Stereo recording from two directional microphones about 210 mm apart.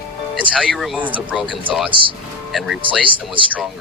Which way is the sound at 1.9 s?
25° right (ahead or behind).